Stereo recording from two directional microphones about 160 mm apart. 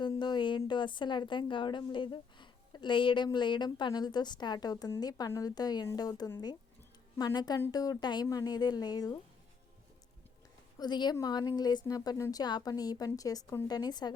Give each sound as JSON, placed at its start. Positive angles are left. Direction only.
{"t": 0.0, "sound": "a woman's voice", "side_deg": 30}
{"t": 10.8, "sound": "a woman's voice", "side_deg": 25}